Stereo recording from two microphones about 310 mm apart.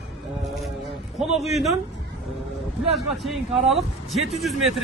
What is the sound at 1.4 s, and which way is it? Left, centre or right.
Speech, centre.